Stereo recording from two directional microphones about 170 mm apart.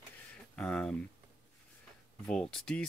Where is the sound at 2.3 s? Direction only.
5° left (ahead or behind).